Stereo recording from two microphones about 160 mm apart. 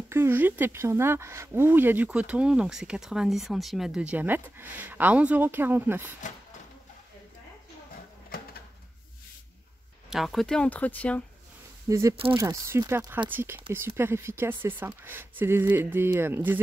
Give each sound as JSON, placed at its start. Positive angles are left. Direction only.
{"t": 0.1, "sound": "speech", "side_deg": -15}
{"t": 10.0, "sound": "speech", "side_deg": 0}
{"t": 11.9, "sound": "speech", "side_deg": -20}